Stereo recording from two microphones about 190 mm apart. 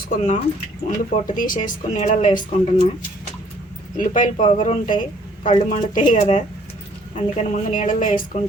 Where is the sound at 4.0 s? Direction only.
40° left (ahead or behind).